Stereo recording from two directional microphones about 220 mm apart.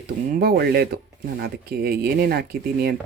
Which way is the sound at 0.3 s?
45° right (ahead or behind).